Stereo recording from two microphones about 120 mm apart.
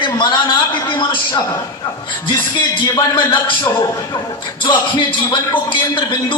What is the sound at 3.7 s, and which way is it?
A man's voice, 40° left (ahead or behind).